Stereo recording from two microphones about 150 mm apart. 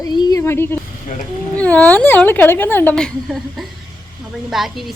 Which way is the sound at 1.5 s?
10° left (ahead or behind).